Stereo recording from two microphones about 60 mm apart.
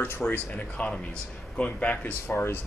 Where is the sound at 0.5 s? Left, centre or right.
Left.